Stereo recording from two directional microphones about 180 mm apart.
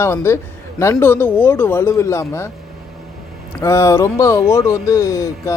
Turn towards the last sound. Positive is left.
turn(degrees=15)  # may be behind; listen again after turning